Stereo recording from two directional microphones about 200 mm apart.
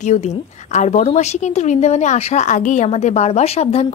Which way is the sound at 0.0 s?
35° left (ahead or behind).